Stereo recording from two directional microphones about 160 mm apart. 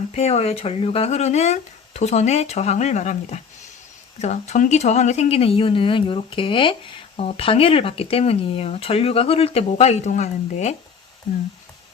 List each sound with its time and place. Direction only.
0.1 s speech: 40° left (ahead or behind)